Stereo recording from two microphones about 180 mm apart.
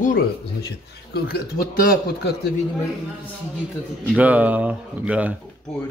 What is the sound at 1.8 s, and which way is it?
Speech, 60° left (ahead or behind).